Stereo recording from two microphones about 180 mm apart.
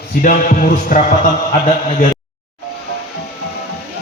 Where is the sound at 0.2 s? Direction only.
50° left (ahead or behind).